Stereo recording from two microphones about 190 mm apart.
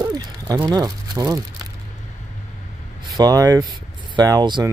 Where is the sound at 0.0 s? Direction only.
20° right (ahead or behind).